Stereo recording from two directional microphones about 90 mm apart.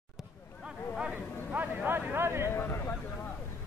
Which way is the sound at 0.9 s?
15° right (ahead or behind).